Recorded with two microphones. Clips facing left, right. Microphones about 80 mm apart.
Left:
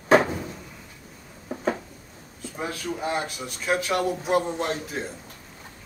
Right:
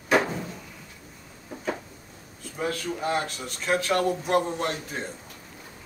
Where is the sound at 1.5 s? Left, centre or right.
Left.